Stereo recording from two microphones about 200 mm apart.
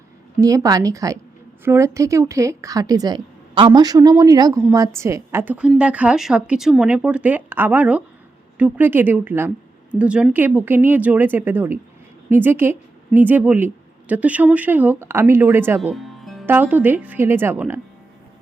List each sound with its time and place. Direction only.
0.3 s a woman's voice: 15° right (ahead or behind)
15.8 s music: centre (ahead or behind)
16.5 s a woman's voice: 10° right (ahead or behind)